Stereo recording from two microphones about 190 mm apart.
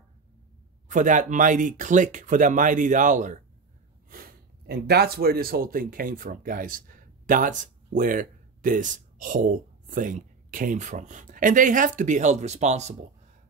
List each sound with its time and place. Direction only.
0.8 s speech: 40° right (ahead or behind)
4.1 s speech: 55° right (ahead or behind); by 12.9 s 35° right (ahead or behind)